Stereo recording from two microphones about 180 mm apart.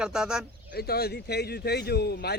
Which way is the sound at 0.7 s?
60° left (ahead or behind).